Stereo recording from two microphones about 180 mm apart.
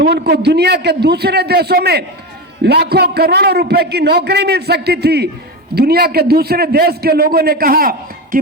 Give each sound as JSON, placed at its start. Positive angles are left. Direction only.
{"t": 0.0, "sound": "a man's voice", "side_deg": -65}